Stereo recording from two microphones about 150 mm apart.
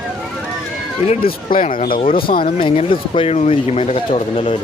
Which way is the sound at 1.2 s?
70° left (ahead or behind).